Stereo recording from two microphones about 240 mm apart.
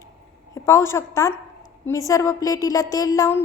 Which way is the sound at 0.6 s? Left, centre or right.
Centre.